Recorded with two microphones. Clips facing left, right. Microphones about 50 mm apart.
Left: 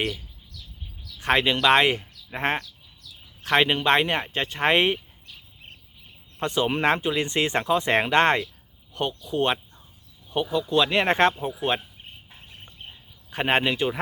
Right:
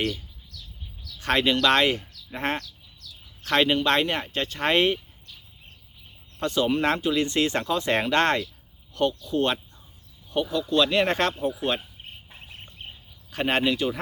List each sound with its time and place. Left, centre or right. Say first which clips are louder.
1.0 s speech: left 1 dB; centre
6.4 s speech: even; left
13.3 s speech: left 1 dB; centre